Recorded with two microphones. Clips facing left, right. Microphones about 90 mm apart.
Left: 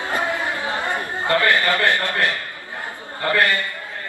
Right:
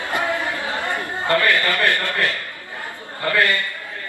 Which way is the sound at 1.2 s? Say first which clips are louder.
Even; 20° left (ahead or behind).